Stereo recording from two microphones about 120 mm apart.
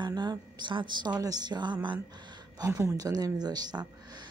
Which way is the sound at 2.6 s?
25° right (ahead or behind).